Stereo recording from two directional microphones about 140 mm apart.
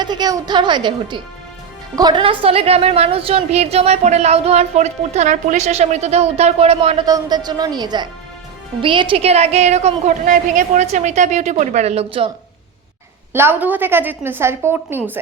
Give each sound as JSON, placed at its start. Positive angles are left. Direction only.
{"t": 0.0, "sound": "a woman's voice", "side_deg": -30}
{"t": 2.2, "sound": "a woman's voice", "side_deg": -45}
{"t": 7.0, "sound": "a woman's voice", "side_deg": -30}
{"t": 13.3, "sound": "a woman's voice", "side_deg": -15}